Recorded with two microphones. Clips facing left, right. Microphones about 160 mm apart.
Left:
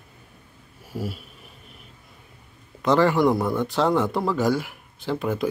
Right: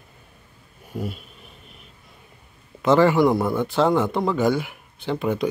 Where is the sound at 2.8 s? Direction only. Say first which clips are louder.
Right 2 dB; centre (ahead or behind).